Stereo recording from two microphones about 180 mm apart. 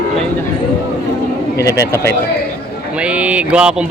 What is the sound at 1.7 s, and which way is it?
Speech, 15° left (ahead or behind).